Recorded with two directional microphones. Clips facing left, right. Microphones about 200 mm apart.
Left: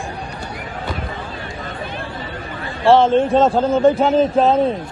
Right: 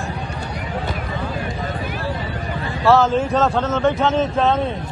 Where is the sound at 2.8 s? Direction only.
30° left (ahead or behind).